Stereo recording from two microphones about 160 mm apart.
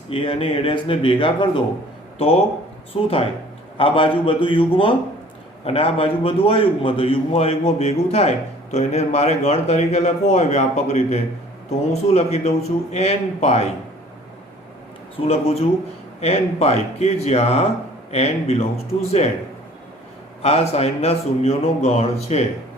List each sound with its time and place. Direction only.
0.1 s a man's voice: 35° left (ahead or behind)
15.3 s a man's voice: 40° left (ahead or behind)
20.4 s a man's voice: 40° left (ahead or behind)